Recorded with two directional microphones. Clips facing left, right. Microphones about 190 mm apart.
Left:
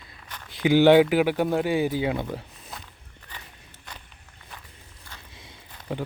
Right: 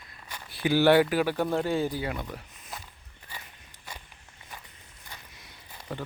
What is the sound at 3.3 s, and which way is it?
Walk, 10° right (ahead or behind).